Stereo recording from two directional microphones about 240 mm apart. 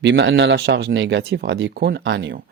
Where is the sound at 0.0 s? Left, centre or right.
Right.